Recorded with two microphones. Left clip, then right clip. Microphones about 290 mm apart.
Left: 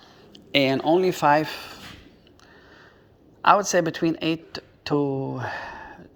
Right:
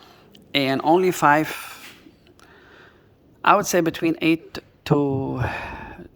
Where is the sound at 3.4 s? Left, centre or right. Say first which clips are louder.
Right 1 dB; centre.